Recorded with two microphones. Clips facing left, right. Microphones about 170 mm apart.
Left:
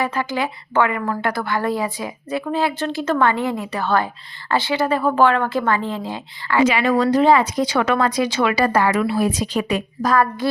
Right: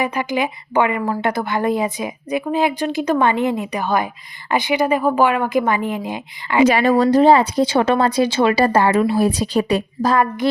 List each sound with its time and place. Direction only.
0.0 s a woman's voice: 15° right (ahead or behind)
6.7 s speech: 40° right (ahead or behind)